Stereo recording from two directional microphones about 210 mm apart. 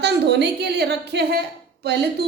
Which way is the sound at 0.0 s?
55° right (ahead or behind).